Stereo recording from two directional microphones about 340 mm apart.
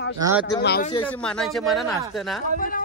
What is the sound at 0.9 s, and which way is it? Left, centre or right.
Speech, centre.